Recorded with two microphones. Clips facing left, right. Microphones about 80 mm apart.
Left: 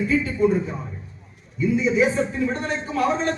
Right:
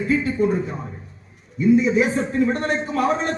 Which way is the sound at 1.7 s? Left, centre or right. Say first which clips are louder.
Right 1 dB; right.